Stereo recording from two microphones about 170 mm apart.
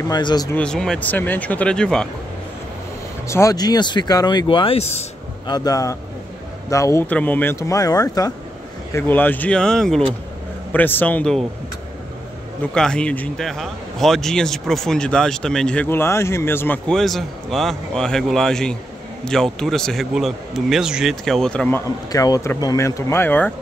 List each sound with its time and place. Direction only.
0.1 s speech: 25° left (ahead or behind)
0.6 s speech: 5° left (ahead or behind)
3.3 s speech: 20° left (ahead or behind); by 5.0 s 35° left (ahead or behind)
5.5 s speech: 20° left (ahead or behind)
8.9 s speech: 10° left (ahead or behind)
12.7 s a man's voice: 5° left (ahead or behind)